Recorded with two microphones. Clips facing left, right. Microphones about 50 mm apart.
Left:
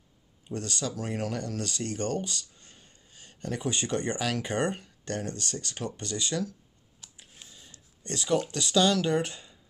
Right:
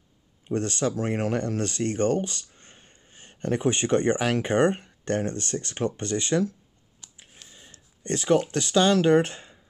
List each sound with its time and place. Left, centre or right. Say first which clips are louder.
0.5 s speech: right 7 dB; right
7.0 s a sound: right 1 dB; centre
7.5 s speech: right 2 dB; right